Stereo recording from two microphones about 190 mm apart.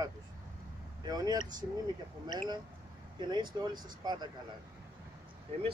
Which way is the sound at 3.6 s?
20° right (ahead or behind).